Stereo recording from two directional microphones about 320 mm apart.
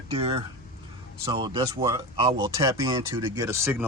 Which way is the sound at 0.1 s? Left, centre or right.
Centre.